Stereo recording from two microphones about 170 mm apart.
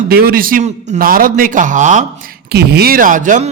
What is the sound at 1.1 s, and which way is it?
Speech, 55° right (ahead or behind).